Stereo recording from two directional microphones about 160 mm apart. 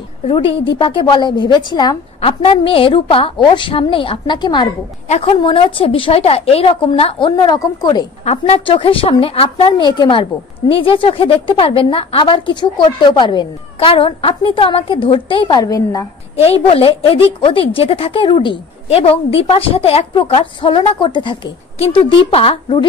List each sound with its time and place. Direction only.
0.7 s a woman's voice: 30° left (ahead or behind)
5.0 s a woman's voice: 45° left (ahead or behind)
5.4 s a woman's voice: 35° left (ahead or behind)
8.3 s a woman's voice: 40° left (ahead or behind); by 16.1 s 20° left (ahead or behind)
16.3 s a woman's voice: 35° left (ahead or behind)